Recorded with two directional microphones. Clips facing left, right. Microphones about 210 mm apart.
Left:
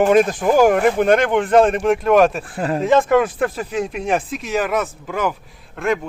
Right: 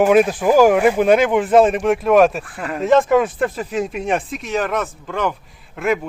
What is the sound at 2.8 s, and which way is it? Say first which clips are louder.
Speech: right 1 dB; centre (ahead or behind).